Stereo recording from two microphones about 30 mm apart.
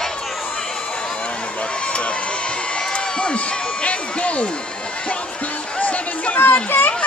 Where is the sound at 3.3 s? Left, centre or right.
Left.